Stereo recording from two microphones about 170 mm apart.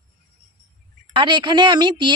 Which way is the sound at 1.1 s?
25° right (ahead or behind).